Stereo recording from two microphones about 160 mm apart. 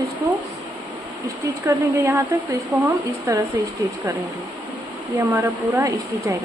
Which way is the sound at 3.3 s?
20° right (ahead or behind).